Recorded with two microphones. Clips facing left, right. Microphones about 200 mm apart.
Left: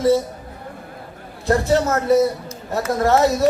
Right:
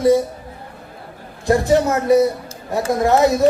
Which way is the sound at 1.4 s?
15° right (ahead or behind).